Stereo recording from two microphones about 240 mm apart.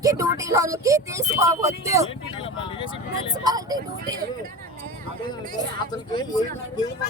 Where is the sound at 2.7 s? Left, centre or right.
Left.